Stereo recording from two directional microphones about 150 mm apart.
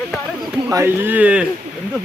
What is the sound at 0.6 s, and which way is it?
Speech, 15° right (ahead or behind).